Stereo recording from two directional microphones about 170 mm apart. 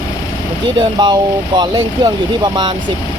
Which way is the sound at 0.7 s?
25° right (ahead or behind).